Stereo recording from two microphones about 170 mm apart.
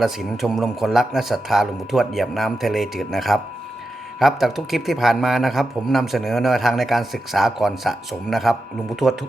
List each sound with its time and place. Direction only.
0.0 s speech: centre (ahead or behind)